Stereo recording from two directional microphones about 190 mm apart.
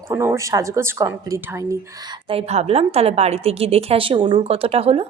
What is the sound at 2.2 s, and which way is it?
A woman's voice, 30° right (ahead or behind).